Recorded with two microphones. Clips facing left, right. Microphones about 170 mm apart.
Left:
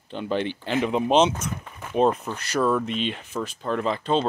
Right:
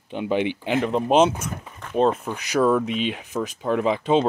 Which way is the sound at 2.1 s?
10° right (ahead or behind).